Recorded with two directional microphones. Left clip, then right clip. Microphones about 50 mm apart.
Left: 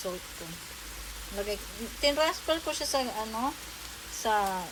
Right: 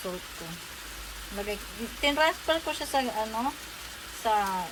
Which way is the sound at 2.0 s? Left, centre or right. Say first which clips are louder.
Right 2 dB; centre.